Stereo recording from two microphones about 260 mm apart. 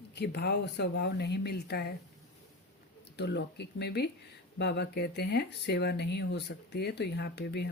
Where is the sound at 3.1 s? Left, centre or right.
Left.